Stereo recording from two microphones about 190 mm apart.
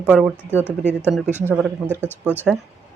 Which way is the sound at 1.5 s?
5° right (ahead or behind).